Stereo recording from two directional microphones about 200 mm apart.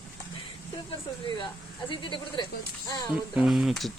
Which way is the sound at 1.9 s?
25° left (ahead or behind).